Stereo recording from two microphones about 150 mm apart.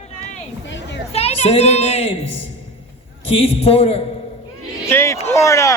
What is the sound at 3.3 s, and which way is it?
Speech, 40° left (ahead or behind).